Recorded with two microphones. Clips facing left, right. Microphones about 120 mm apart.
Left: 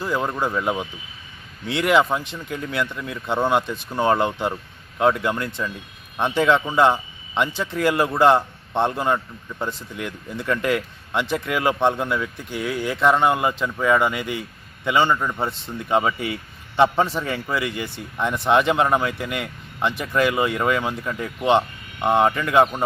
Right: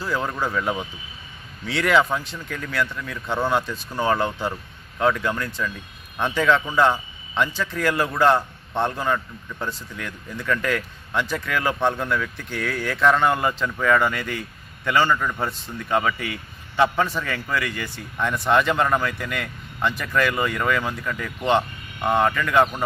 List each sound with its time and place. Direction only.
0.0 s a man's voice: 15° left (ahead or behind)